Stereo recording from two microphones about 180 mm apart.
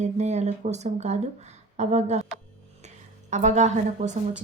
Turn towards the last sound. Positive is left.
turn(degrees=-40)  # may be behind; listen again after turning